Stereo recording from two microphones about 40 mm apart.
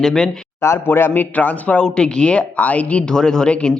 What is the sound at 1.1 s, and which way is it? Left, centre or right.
Speech, left.